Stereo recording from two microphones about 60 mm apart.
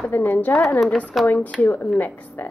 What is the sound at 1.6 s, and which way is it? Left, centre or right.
Speech, left.